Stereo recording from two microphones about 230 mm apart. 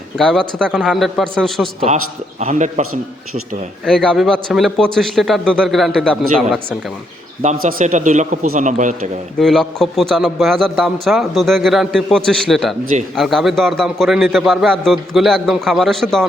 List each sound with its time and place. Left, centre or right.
0.2 s a man's voice: centre
2.4 s a man's voice: right
3.8 s a man's voice: centre
7.4 s a man's voice: right
9.4 s a man's voice: centre